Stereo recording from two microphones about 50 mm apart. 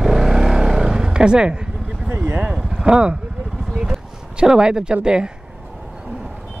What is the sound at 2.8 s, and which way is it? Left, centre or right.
Speech, centre.